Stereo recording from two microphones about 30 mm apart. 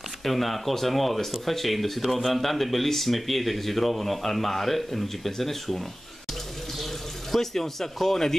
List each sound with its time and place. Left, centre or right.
0.2 s speech: centre